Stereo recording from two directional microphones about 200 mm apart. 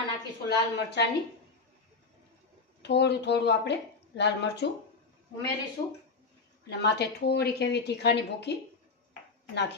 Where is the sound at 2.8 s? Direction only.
60° left (ahead or behind).